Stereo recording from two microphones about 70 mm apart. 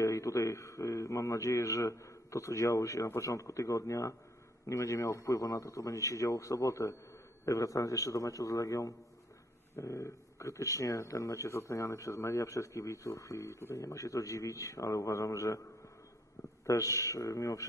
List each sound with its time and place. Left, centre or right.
0.0 s a man's voice: left
13.8 s a man's voice: left
16.6 s a man's voice: left